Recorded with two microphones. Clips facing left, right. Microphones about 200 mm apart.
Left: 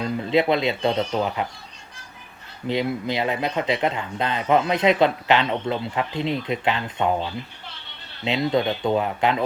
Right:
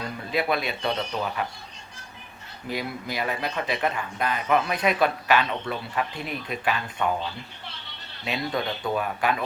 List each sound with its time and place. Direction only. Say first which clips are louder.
0.0 s speech: left 7 dB; 20° left (ahead or behind)
2.6 s speech: left 7 dB; 25° left (ahead or behind)
8.2 s speech: left 7 dB; 20° left (ahead or behind)